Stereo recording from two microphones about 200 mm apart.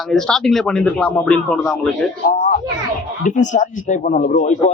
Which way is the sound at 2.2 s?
35° left (ahead or behind).